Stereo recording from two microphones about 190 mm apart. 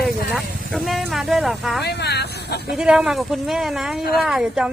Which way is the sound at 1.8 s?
60° left (ahead or behind).